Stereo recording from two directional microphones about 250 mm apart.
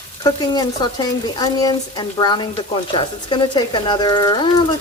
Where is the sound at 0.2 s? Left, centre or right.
Centre.